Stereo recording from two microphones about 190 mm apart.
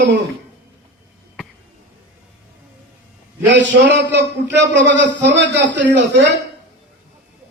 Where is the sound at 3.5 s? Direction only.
70° right (ahead or behind).